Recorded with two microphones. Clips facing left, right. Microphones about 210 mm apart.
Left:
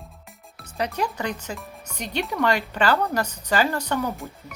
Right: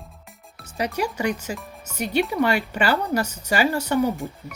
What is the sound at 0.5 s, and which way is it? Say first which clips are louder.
Speech: right 1 dB; 10° right (ahead or behind).